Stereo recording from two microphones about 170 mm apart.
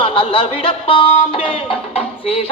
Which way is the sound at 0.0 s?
30° left (ahead or behind).